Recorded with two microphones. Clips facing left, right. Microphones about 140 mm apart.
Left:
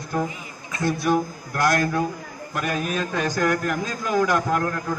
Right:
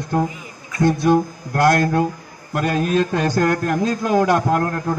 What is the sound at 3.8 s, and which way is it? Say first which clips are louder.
A man's voice: right 7 dB; 60° right (ahead or behind).